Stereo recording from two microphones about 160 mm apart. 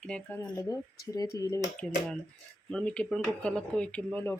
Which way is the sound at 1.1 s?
20° left (ahead or behind).